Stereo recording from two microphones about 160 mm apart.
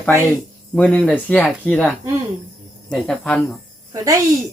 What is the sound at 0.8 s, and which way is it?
Speech, 5° left (ahead or behind).